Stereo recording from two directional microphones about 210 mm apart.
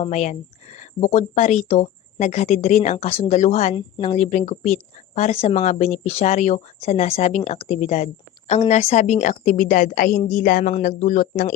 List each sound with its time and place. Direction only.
0.0 s speech: 35° left (ahead or behind)